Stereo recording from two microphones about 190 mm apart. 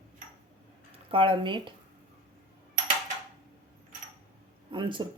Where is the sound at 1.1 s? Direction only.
25° right (ahead or behind).